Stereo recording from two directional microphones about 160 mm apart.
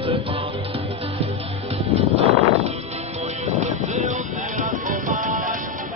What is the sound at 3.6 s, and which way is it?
Music, 45° right (ahead or behind).